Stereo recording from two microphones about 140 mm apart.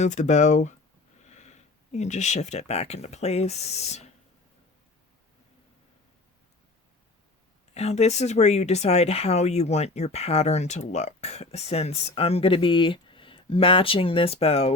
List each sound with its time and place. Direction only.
0.0 s speech: 55° left (ahead or behind)
7.7 s speech: 50° left (ahead or behind)